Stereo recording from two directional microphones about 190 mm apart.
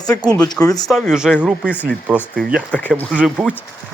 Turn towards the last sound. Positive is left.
turn(degrees=0)  # may be behind; listen again after turning